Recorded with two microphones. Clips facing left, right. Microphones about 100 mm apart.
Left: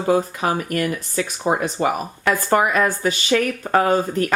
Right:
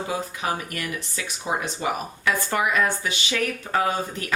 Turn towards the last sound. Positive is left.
turn(degrees=45)  # may be behind; listen again after turning